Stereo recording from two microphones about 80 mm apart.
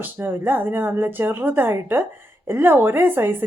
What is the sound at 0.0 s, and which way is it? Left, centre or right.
A woman's voice, right.